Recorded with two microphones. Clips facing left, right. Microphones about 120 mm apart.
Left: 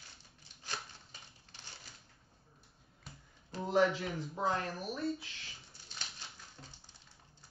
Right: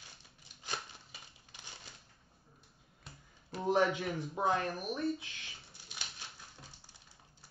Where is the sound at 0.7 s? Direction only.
15° right (ahead or behind).